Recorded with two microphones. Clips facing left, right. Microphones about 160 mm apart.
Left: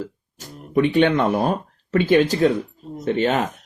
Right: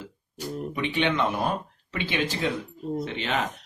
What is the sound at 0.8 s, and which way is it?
Speech, 45° left (ahead or behind).